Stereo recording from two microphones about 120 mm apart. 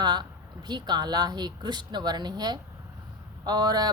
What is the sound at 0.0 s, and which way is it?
A woman's voice, 35° right (ahead or behind).